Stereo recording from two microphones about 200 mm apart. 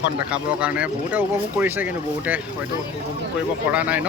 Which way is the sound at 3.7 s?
5° right (ahead or behind).